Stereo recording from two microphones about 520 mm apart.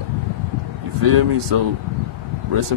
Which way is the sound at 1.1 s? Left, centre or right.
Right.